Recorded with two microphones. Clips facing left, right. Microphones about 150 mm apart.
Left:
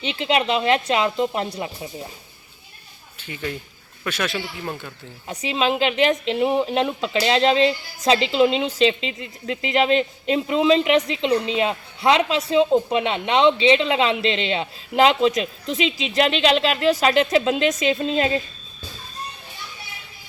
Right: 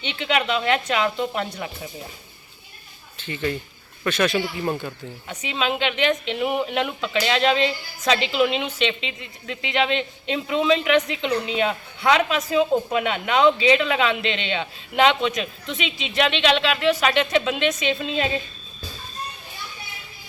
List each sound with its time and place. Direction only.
0.0 s speech: 35° left (ahead or behind)
3.2 s speech: 5° left (ahead or behind)
5.3 s speech: 35° left (ahead or behind)